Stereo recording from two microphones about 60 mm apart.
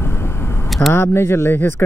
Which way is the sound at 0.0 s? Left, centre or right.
Left.